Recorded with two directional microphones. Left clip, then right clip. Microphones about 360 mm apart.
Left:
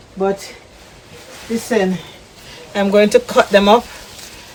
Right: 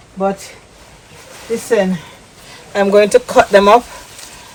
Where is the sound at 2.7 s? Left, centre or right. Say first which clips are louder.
Right 2 dB; centre.